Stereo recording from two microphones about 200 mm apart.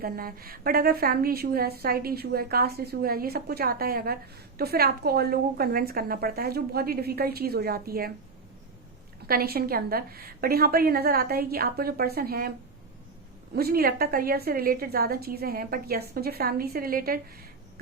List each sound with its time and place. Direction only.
0.0 s a woman's voice: 45° right (ahead or behind)
9.2 s a woman's voice: 50° right (ahead or behind)
13.6 s a woman's voice: 50° right (ahead or behind)